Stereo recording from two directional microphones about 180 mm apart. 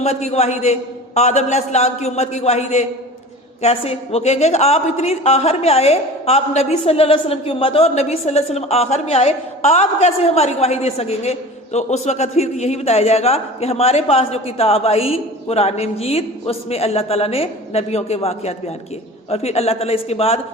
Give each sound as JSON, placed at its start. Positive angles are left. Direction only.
{"t": 0.0, "sound": "a woman's voice", "side_deg": 35}